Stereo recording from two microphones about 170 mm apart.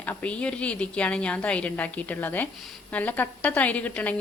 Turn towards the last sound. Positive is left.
turn(degrees=10)  # may be behind; listen again after turning